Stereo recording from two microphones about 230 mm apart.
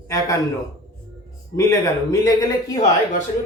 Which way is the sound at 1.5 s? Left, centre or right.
Centre.